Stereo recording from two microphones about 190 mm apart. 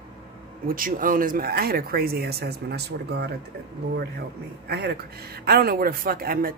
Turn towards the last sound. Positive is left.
turn(degrees=-50)  # may be behind; listen again after turning